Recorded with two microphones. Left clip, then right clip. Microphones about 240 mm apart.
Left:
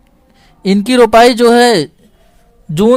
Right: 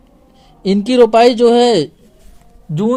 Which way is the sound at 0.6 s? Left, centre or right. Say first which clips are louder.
Left 1 dB; left.